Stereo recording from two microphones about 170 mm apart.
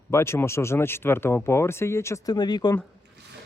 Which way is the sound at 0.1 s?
15° left (ahead or behind).